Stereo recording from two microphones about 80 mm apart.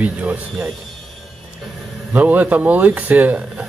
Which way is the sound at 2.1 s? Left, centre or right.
Centre.